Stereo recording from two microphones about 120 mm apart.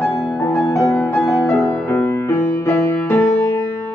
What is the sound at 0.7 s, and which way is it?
Music, 30° left (ahead or behind).